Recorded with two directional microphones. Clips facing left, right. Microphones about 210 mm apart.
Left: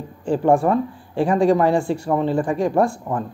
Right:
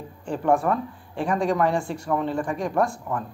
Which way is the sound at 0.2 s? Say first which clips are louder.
Left 5 dB; 30° left (ahead or behind).